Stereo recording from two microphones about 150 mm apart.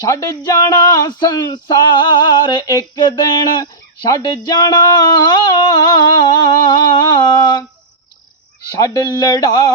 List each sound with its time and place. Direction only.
0.0 s speech: 20° left (ahead or behind)
4.1 s a sound: 25° left (ahead or behind)
8.8 s speech: 25° left (ahead or behind)